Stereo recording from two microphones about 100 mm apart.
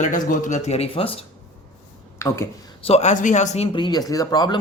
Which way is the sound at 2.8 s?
70° left (ahead or behind).